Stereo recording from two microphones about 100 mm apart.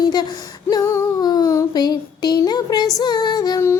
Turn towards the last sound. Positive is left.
turn(degrees=45)  # may be behind; listen again after turning